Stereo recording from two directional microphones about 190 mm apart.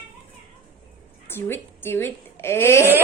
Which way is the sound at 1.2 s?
10° left (ahead or behind).